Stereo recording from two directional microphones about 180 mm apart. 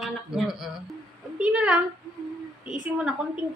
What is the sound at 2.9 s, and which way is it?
Speech, 5° right (ahead or behind).